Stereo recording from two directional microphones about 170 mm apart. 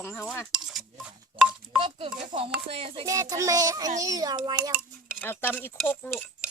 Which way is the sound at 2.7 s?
35° right (ahead or behind).